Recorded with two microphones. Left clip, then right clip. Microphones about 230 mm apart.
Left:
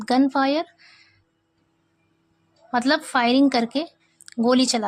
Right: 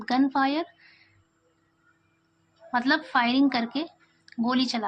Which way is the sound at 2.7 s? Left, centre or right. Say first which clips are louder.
Left 3 dB; left.